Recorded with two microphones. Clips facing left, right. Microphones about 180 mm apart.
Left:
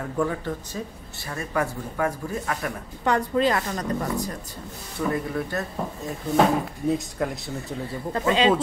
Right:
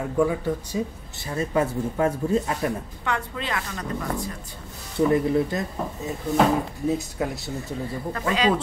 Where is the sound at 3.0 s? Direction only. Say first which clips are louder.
Left 8 dB; 40° left (ahead or behind).